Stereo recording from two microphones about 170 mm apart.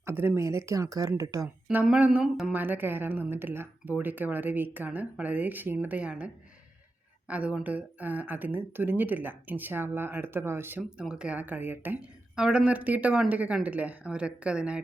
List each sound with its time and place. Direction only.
0.0 s a woman's voice: 15° right (ahead or behind)
1.6 s a woman's voice: 5° right (ahead or behind)